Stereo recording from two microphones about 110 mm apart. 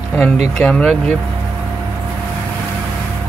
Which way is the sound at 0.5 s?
10° left (ahead or behind).